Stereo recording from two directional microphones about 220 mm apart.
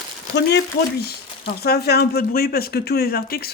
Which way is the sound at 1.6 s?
45° left (ahead or behind).